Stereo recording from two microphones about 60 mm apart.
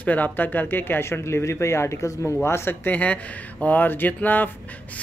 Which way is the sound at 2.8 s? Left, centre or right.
Left.